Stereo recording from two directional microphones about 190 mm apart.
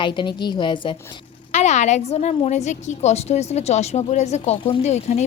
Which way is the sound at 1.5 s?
40° left (ahead or behind).